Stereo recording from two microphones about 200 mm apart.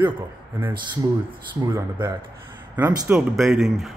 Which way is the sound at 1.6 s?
20° right (ahead or behind).